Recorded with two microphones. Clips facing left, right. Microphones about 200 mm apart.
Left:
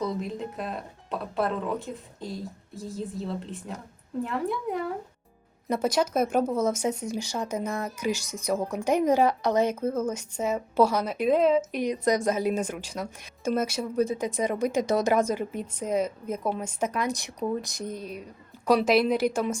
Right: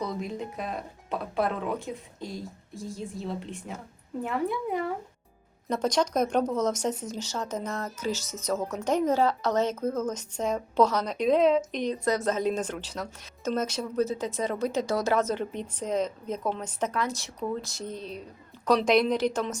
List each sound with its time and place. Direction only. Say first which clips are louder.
0.0 s speech: left 2 dB; centre (ahead or behind)